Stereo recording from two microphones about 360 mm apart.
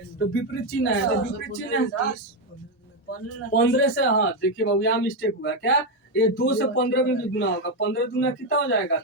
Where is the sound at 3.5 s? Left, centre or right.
Left.